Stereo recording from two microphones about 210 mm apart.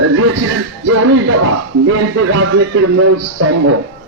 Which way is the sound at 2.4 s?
80° right.